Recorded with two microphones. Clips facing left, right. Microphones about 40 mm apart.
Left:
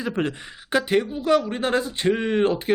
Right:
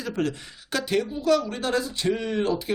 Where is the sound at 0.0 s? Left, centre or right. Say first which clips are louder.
Left 2 dB; left.